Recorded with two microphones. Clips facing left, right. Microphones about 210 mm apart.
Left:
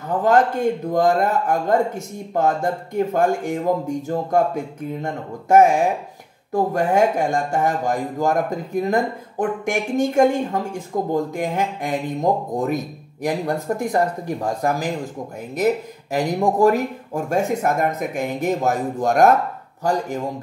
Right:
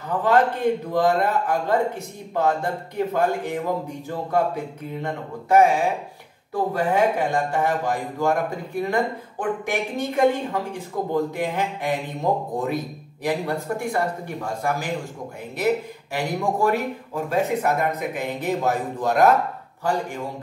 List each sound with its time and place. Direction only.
0.2 s speech: 45° left (ahead or behind)
5.0 s speech: 45° left (ahead or behind)